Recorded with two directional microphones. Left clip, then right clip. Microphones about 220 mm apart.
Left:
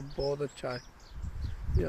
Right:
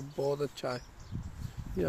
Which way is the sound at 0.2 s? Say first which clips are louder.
Even; 20° right (ahead or behind).